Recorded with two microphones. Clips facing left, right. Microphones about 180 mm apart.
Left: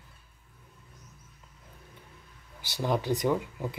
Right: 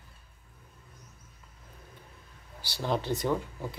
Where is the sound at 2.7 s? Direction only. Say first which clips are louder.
Left 2 dB; 15° left (ahead or behind).